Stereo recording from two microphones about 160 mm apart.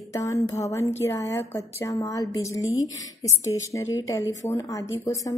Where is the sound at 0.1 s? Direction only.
20° left (ahead or behind).